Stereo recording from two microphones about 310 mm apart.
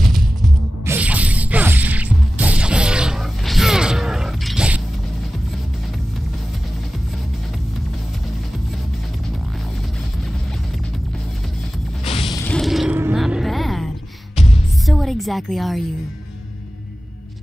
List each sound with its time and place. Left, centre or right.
0.8 s mechanisms: centre
12.0 s music: centre
14.3 s music: centre
14.9 s a sound: centre